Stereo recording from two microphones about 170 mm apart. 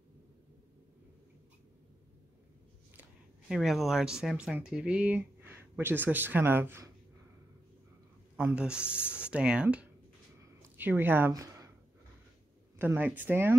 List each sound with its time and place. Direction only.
3.0 s speech: centre (ahead or behind)
8.5 s speech: 5° right (ahead or behind)
10.4 s a sound: 15° right (ahead or behind)
12.7 s speech: 10° right (ahead or behind)